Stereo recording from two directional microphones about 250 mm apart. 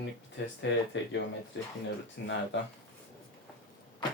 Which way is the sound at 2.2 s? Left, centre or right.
Left.